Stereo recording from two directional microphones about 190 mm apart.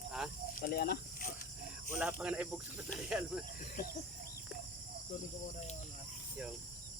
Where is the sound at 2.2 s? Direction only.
5° right (ahead or behind).